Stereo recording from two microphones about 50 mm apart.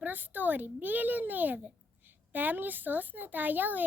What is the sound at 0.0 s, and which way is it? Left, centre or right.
Speech, right.